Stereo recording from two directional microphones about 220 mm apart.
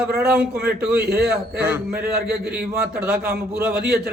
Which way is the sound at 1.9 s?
45° right (ahead or behind).